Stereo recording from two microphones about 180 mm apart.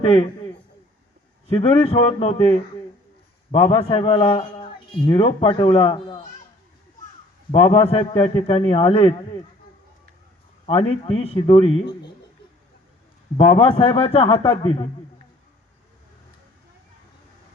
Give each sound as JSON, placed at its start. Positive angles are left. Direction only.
{"t": 0.0, "sound": "a man's voice", "side_deg": 30}
{"t": 1.5, "sound": "a man's voice", "side_deg": 30}
{"t": 7.5, "sound": "a man's voice", "side_deg": 30}
{"t": 10.7, "sound": "a man's voice", "side_deg": 30}
{"t": 13.3, "sound": "a man's voice", "side_deg": 30}